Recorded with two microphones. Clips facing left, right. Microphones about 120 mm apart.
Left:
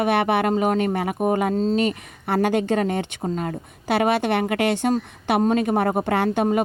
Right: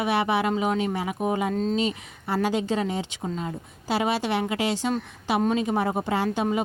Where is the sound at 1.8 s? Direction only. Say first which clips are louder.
Left 4 dB; 55° left (ahead or behind).